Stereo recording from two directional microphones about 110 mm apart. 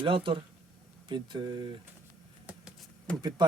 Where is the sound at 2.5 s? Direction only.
10° right (ahead or behind).